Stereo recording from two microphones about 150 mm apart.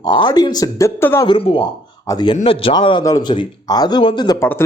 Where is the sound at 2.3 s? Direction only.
40° left (ahead or behind).